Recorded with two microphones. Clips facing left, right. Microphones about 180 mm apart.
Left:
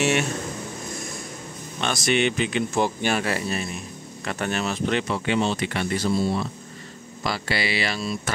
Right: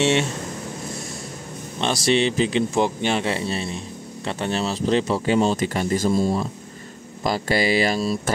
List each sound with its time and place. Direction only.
0.0 s speech: 30° right (ahead or behind)
1.8 s speech: 30° right (ahead or behind)
2.7 s speech: 20° right (ahead or behind); by 8.2 s 40° right (ahead or behind)